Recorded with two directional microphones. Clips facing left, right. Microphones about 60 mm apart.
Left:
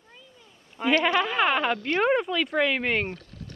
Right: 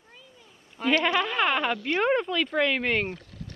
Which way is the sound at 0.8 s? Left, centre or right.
Centre.